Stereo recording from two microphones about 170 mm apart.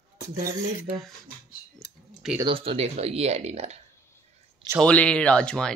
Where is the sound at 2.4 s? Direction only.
30° right (ahead or behind).